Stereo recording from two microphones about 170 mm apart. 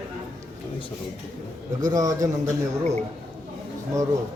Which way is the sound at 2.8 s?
40° right (ahead or behind).